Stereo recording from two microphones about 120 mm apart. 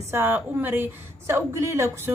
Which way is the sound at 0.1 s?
15° right (ahead or behind).